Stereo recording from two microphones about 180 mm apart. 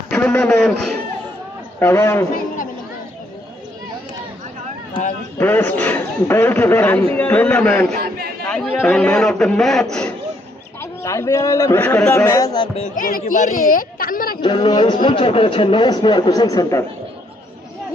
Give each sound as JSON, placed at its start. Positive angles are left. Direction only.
{"t": 0.1, "sound": "speech", "side_deg": 5}
{"t": 1.8, "sound": "a man's voice", "side_deg": 15}
{"t": 5.4, "sound": "a man's voice", "side_deg": 10}
{"t": 7.9, "sound": "a sound", "side_deg": -60}
{"t": 8.4, "sound": "a man's voice", "side_deg": 5}
{"t": 10.8, "sound": "a man's voice", "side_deg": 15}
{"t": 13.0, "sound": "a woman's voice", "side_deg": 50}
{"t": 14.4, "sound": "speech", "side_deg": 25}